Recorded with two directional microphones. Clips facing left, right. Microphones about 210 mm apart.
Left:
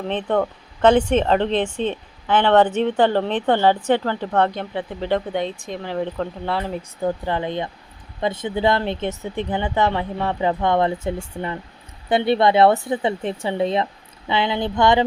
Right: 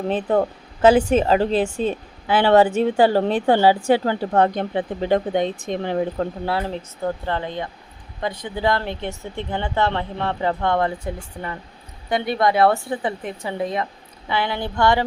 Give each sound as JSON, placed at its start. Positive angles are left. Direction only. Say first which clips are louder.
{"t": 0.1, "sound": "a woman's voice", "louder": "right 1 dB", "side_deg": -5}
{"t": 6.4, "sound": "speech", "louder": "even", "side_deg": -5}
{"t": 7.0, "sound": "speech", "louder": "left 2 dB", "side_deg": 15}